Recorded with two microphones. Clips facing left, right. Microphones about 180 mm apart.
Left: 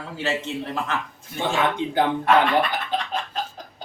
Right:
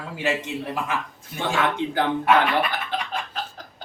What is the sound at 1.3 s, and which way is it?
Speech, 15° left (ahead or behind).